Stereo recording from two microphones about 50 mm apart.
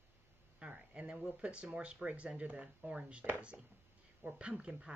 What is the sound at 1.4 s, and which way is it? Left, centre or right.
Speech, right.